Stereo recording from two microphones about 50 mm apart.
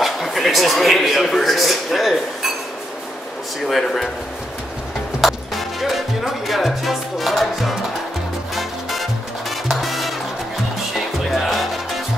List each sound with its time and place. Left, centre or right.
0.0 s a man's voice: centre
3.6 s speech: centre
5.2 s music: centre
9.5 s music: centre
11.2 s music: centre